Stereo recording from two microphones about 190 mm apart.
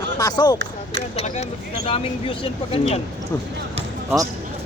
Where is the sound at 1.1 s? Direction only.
35° left (ahead or behind).